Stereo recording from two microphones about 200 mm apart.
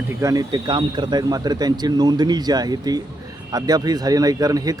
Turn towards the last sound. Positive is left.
turn(degrees=-20)  # may be behind; listen again after turning